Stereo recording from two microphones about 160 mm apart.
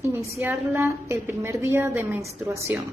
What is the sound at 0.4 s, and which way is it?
A woman's voice, 15° right (ahead or behind).